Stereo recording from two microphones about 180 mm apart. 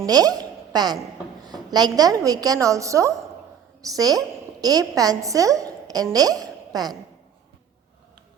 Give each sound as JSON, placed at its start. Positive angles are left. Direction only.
{"t": 0.0, "sound": "a woman's voice", "side_deg": -20}